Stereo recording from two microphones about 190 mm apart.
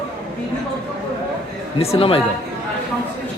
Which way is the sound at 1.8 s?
30° left (ahead or behind).